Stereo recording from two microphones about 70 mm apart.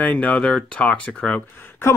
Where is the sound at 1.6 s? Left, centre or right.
Left.